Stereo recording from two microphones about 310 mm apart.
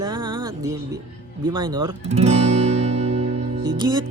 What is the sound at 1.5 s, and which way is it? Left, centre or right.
Music, centre.